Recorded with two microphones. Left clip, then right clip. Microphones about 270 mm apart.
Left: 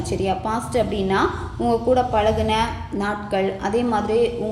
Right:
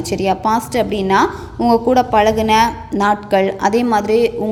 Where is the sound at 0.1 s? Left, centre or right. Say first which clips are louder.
Right 7 dB; right.